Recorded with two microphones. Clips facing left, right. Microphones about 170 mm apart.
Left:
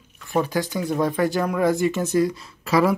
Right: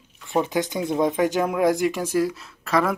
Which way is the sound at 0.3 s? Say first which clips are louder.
Even; 20° right (ahead or behind).